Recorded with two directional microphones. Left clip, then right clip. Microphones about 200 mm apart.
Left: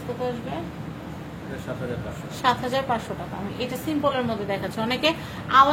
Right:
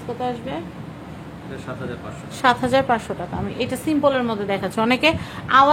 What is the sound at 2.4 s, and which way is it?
A woman's voice, 55° right (ahead or behind).